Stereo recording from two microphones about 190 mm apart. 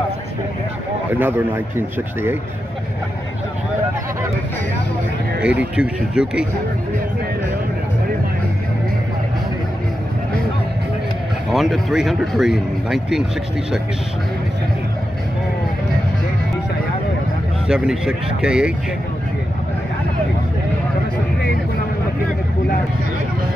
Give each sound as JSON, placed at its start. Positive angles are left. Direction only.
{"t": 1.2, "sound": "a man's voice", "side_deg": -10}
{"t": 5.4, "sound": "speech", "side_deg": -5}
{"t": 11.5, "sound": "speech", "side_deg": 0}
{"t": 17.6, "sound": "speech", "side_deg": -5}